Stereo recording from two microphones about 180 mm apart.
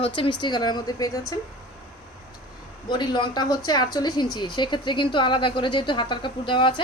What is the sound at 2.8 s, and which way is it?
A woman's voice, 25° left (ahead or behind).